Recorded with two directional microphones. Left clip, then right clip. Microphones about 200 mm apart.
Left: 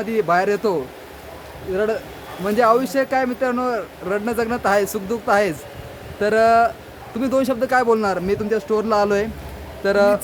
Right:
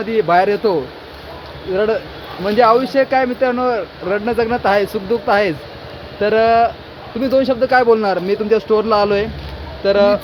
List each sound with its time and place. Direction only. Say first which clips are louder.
0.1 s speech: right 5 dB; 10° left (ahead or behind)